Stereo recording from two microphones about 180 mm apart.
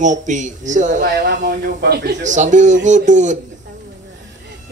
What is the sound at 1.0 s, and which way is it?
A man's voice, 65° right (ahead or behind).